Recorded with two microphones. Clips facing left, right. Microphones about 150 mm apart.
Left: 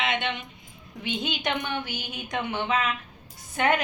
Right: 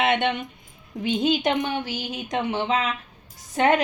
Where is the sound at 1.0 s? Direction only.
40° right (ahead or behind).